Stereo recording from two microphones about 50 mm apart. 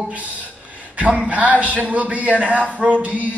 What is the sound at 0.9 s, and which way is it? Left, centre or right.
A man's voice, right.